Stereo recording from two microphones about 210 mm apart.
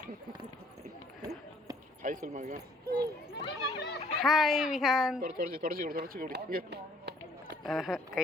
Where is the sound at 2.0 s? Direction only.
35° right (ahead or behind).